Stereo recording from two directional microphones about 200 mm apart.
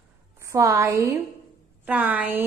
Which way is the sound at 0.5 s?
15° right (ahead or behind).